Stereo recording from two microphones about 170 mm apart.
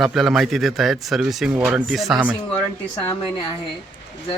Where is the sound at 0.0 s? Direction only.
Centre (ahead or behind).